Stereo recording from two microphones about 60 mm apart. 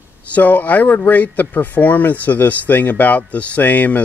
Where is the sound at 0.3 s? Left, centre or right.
Left.